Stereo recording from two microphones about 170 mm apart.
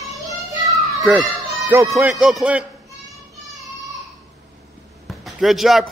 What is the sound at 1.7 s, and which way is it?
Speech, 15° right (ahead or behind).